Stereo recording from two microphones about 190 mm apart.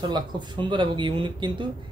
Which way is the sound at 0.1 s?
25° right (ahead or behind).